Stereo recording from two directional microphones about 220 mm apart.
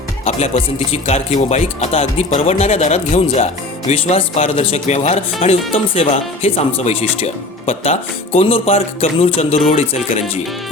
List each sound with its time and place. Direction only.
0.3 s speech: 30° left (ahead or behind)